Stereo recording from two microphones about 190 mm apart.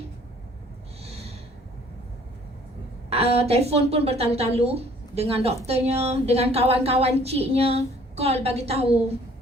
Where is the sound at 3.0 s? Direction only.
30° right (ahead or behind).